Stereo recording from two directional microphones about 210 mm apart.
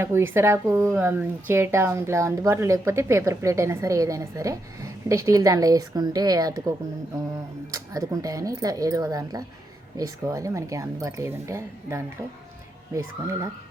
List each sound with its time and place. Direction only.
0.0 s a woman's voice: 10° right (ahead or behind)
7.7 s a woman's voice: 15° right (ahead or behind)